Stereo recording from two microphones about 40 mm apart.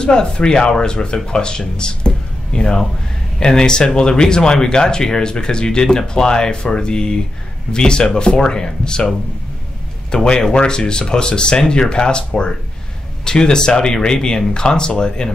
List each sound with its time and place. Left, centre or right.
0.0 s speech: left
10.1 s speech: centre